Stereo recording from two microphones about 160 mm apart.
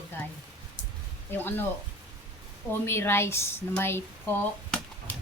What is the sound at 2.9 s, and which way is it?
Speech, 15° left (ahead or behind).